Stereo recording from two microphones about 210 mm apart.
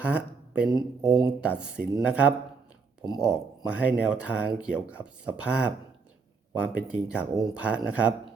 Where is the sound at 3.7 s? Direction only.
5° right (ahead or behind).